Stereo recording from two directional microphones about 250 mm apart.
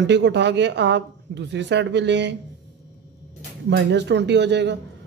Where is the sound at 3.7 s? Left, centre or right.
Right.